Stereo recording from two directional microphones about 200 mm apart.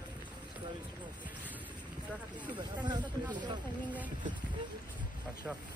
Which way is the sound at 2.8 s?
20° right (ahead or behind).